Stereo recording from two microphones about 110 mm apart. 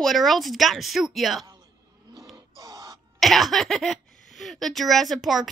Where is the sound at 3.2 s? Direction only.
Centre (ahead or behind).